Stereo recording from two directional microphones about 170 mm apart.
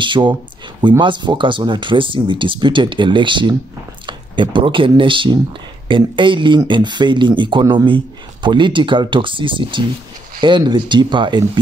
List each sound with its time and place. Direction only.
0.0 s speech: 30° right (ahead or behind)